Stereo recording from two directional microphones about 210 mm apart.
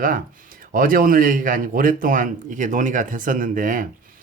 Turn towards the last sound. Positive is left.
turn(degrees=-40)  # may be behind; listen again after turning